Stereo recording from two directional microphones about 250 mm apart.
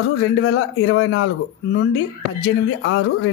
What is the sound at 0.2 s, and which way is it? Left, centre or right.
Speech, left.